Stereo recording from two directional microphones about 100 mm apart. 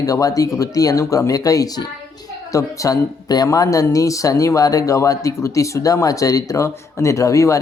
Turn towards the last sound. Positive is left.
turn(degrees=30)  # may be behind; listen again after turning